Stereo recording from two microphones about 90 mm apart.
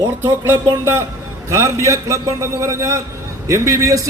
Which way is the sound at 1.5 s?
35° right (ahead or behind).